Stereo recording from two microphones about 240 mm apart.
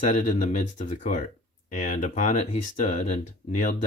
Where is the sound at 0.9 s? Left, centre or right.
Left.